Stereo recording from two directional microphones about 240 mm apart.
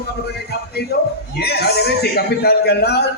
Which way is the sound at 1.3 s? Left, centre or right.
Left.